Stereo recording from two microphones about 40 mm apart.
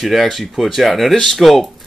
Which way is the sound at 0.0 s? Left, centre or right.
Centre.